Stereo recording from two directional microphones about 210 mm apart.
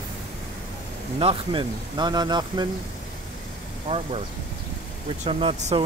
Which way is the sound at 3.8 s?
30° right (ahead or behind).